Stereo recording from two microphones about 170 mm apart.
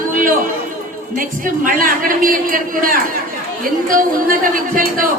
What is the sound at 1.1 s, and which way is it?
A man's voice, 55° right (ahead or behind).